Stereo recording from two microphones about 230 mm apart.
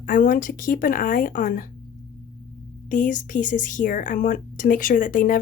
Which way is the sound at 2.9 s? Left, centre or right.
Left.